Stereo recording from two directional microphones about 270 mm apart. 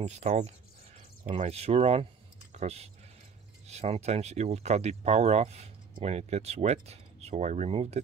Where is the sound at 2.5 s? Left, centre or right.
Right.